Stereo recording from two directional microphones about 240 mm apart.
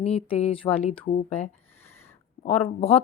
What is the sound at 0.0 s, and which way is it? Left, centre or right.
Speech, left.